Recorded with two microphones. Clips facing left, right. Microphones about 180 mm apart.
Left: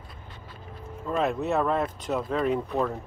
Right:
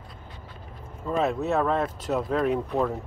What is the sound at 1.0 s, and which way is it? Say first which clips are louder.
Speech: right 1 dB; centre (ahead or behind).